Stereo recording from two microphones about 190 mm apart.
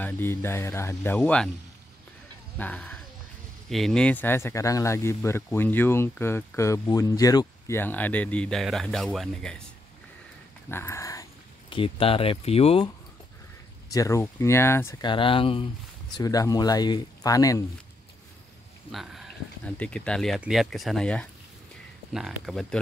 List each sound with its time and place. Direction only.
0.0 s speech: 10° left (ahead or behind)
2.5 s speech: 10° left (ahead or behind)
10.7 s speech: 15° left (ahead or behind)
11.7 s speech: 30° left (ahead or behind)
13.9 s speech: 15° left (ahead or behind)
18.9 s speech: centre (ahead or behind)